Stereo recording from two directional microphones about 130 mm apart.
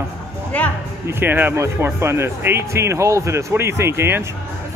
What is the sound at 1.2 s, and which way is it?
Speech, 15° right (ahead or behind).